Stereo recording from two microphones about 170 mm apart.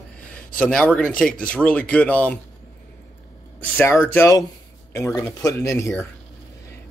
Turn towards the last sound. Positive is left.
turn(degrees=15)  # may be behind; listen again after turning